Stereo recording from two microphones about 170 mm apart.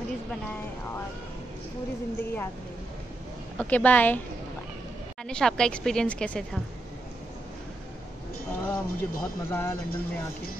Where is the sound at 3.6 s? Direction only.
10° left (ahead or behind).